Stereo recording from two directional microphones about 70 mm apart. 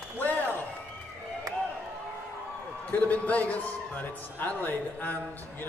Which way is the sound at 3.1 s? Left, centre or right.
Left.